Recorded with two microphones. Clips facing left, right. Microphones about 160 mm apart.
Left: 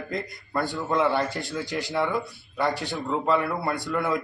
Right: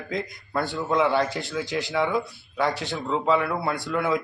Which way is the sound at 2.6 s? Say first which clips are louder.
Even; 10° left (ahead or behind).